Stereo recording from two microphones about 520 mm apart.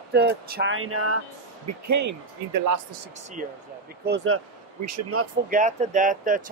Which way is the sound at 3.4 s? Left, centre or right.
Centre.